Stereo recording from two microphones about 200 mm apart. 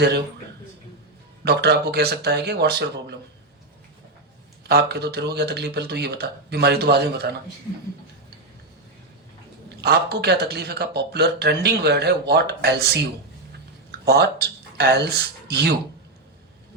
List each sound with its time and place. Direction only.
1.5 s speech: 55° right (ahead or behind)
4.7 s speech: 55° right (ahead or behind)
9.6 s speech: 55° right (ahead or behind)
14.0 s speech: 55° right (ahead or behind)